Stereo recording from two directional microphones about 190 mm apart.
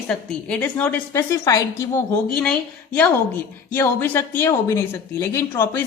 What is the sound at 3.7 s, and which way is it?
A woman's voice, 10° left (ahead or behind).